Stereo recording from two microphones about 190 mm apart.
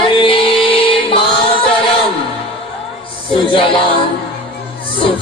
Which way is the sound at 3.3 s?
25° left (ahead or behind).